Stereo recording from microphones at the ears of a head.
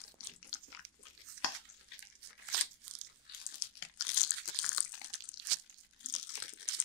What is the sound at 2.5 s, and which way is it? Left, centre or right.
Crunch, right.